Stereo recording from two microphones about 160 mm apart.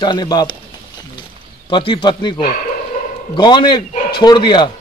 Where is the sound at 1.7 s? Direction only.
30° left (ahead or behind).